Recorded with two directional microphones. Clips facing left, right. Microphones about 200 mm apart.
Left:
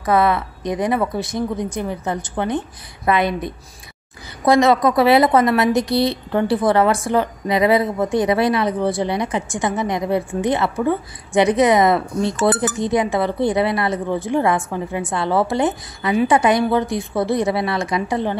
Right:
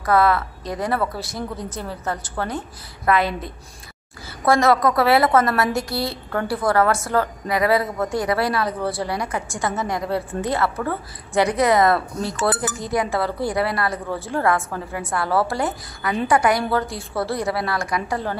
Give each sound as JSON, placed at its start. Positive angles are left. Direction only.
{"t": 0.0, "sound": "a woman's voice", "side_deg": 20}